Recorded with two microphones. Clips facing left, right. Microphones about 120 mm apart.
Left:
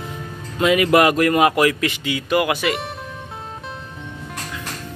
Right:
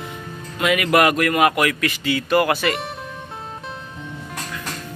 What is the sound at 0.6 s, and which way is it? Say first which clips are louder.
Speech: left 2 dB; 30° left (ahead or behind).